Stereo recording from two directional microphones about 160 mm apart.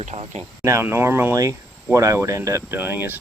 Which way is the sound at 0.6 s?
15° right (ahead or behind).